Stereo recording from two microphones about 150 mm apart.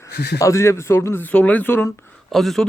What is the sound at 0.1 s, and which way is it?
Speech, 90° left.